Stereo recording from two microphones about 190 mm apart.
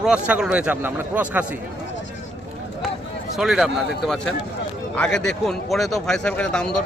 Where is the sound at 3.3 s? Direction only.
Centre (ahead or behind).